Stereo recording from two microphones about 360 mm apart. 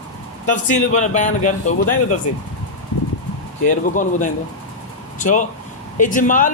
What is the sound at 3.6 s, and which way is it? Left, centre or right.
A man's voice, left.